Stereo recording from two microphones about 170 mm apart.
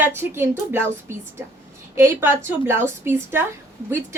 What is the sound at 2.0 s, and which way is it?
A woman's voice, 15° right (ahead or behind).